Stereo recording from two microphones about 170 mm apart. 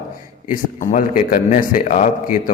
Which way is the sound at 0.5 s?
50° left (ahead or behind).